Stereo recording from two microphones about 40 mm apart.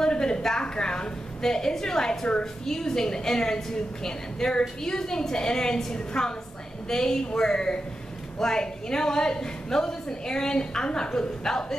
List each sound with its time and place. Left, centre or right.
0.0 s a woman's voice: centre